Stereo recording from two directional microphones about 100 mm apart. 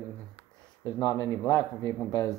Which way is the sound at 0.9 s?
35° left (ahead or behind).